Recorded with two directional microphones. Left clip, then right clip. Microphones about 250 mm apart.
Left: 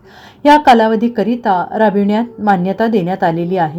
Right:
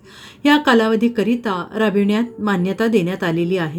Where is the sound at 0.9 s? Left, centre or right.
Centre.